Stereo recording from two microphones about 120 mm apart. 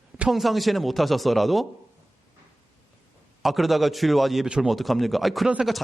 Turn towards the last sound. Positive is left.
turn(degrees=0)  # may be behind; listen again after turning